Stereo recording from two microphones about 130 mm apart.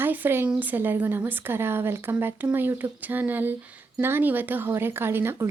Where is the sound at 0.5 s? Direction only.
15° right (ahead or behind).